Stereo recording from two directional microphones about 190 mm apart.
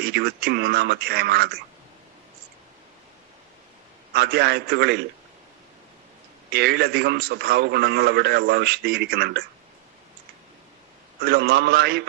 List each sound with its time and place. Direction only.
0.0 s a man's voice: 55° right (ahead or behind)
4.1 s a man's voice: 60° right (ahead or behind)
6.5 s a man's voice: 60° right (ahead or behind)
11.2 s a man's voice: 55° right (ahead or behind)